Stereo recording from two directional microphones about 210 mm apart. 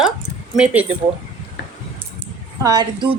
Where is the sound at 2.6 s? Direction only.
20° right (ahead or behind).